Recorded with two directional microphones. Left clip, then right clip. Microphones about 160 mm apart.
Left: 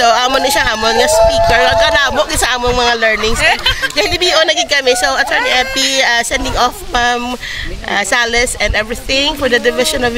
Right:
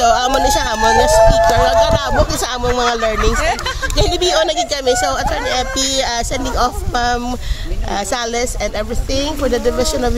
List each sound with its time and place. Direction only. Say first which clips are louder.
0.0 s a sound: left 2 dB; 5° left (ahead or behind)
1.3 s speech: left 2 dB; 5° left (ahead or behind)
3.3 s speech: left 6 dB; 20° right (ahead or behind)
3.9 s speech: even; 5° left (ahead or behind)